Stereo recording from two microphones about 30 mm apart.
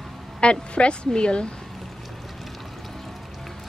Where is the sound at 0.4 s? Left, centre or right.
Left.